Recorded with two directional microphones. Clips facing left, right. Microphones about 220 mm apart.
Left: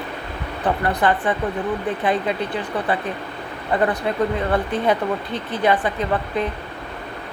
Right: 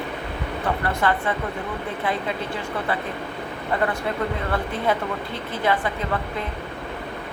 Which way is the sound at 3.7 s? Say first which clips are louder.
Left 4 dB; 20° left (ahead or behind).